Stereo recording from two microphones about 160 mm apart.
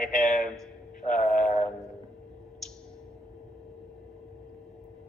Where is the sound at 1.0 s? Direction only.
5° left (ahead or behind).